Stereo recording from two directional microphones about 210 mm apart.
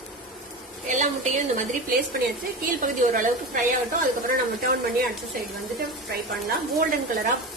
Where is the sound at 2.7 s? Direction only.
40° right (ahead or behind).